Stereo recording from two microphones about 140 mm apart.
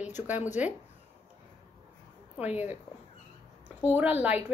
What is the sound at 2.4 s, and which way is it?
Speech, 10° right (ahead or behind).